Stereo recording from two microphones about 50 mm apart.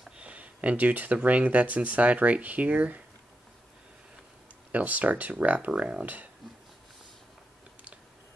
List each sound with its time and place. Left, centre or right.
0.2 s a sound: right
1.1 s speech: right
4.7 s speech: right
5.8 s speech: centre